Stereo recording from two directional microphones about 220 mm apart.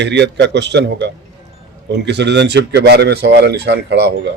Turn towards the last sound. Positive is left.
turn(degrees=-50)  # may be behind; listen again after turning